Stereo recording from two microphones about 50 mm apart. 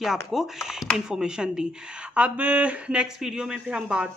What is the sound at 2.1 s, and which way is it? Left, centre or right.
Speech, right.